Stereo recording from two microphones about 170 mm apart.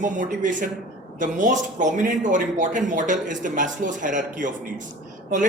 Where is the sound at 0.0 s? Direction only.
50° right (ahead or behind).